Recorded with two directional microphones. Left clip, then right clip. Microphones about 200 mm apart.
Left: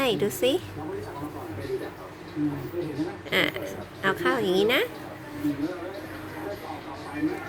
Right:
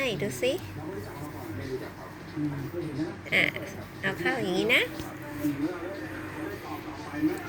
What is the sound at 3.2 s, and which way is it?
A woman's voice, 25° left (ahead or behind).